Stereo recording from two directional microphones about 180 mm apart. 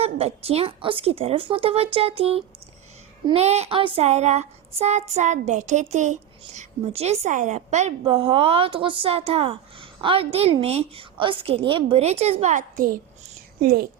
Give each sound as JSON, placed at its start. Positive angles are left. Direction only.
{"t": 0.0, "sound": "child singing", "side_deg": -35}
{"t": 13.6, "sound": "a woman's voice", "side_deg": -55}